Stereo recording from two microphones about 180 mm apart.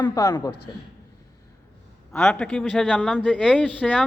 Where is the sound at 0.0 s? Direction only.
20° left (ahead or behind).